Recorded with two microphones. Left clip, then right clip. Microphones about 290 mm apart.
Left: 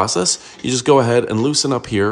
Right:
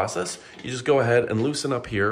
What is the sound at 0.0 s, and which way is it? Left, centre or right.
Speech, centre.